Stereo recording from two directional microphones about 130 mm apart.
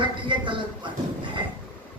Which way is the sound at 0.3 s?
40° right (ahead or behind).